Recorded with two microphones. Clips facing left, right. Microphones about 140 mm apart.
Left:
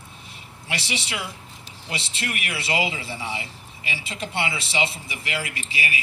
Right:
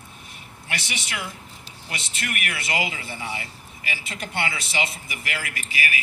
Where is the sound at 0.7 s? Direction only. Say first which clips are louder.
Left 3 dB; 30° left (ahead or behind).